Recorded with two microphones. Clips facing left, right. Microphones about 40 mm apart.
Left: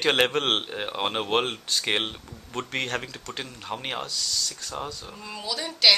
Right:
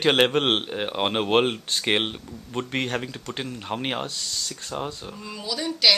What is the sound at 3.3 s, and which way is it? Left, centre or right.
Speech, centre.